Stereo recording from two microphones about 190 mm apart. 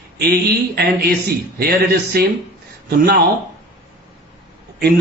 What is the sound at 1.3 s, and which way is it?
Speech, 55° right (ahead or behind).